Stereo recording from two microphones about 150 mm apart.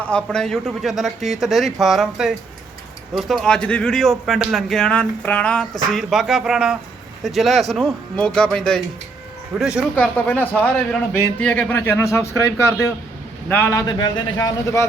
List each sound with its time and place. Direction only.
0.1 s speech: 5° left (ahead or behind)
9.6 s speech: 5° right (ahead or behind)
9.9 s a man's voice: 10° left (ahead or behind)